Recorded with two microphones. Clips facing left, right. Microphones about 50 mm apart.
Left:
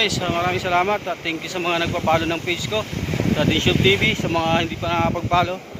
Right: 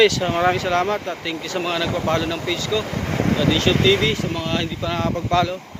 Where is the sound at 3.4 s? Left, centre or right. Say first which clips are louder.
Right 1 dB; left.